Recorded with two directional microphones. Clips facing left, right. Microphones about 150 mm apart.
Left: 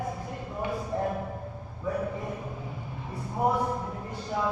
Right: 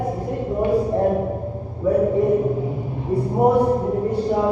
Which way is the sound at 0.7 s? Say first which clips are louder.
Right 11 dB; 35° right (ahead or behind).